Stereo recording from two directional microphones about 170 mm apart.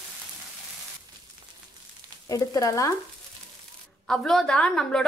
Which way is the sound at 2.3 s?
20° left (ahead or behind).